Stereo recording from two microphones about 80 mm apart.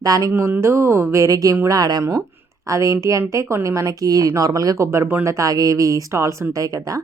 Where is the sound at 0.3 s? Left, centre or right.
Right.